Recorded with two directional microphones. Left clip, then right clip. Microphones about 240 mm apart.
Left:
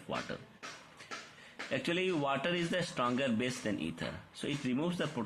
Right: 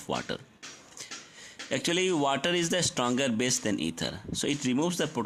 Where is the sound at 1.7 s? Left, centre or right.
Right.